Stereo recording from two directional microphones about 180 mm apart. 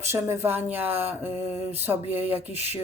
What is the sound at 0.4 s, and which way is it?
A woman's voice, 10° right (ahead or behind).